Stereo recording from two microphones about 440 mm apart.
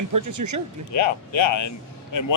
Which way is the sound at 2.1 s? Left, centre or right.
Left.